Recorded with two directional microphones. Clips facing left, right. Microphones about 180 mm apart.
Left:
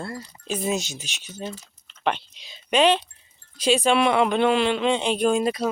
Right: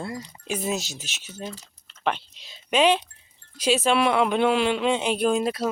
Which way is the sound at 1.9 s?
Centre (ahead or behind).